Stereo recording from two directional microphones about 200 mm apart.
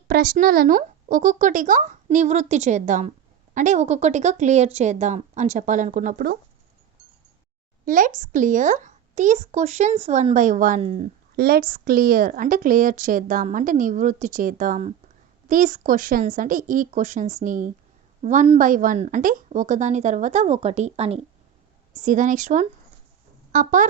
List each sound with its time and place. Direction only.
0.1 s speech: 45° right (ahead or behind)
7.9 s speech: 40° right (ahead or behind)
11.3 s a woman's voice: 50° right (ahead or behind)